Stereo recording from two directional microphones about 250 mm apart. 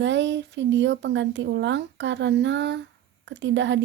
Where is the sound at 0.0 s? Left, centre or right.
Right.